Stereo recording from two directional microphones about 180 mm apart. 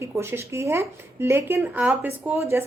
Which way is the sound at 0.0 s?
15° right (ahead or behind).